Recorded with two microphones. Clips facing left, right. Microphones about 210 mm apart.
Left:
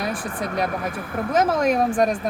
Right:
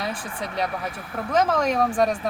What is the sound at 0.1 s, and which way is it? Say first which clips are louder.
Speech: left 4 dB; 45° left (ahead or behind).